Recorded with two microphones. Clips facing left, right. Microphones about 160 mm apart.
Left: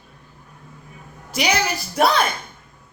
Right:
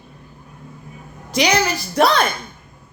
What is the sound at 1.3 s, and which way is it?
Speech, 5° left (ahead or behind).